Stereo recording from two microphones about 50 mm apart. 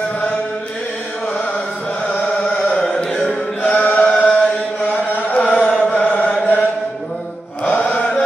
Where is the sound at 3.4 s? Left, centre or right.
Left.